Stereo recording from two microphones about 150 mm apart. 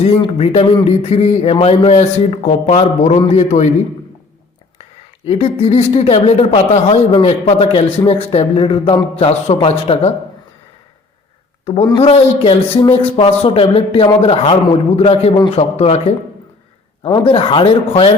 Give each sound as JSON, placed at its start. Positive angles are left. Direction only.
{"t": 0.0, "sound": "a man's voice", "side_deg": 45}
{"t": 5.2, "sound": "a man's voice", "side_deg": 40}
{"t": 11.6, "sound": "a man's voice", "side_deg": 40}
{"t": 17.0, "sound": "speech", "side_deg": 35}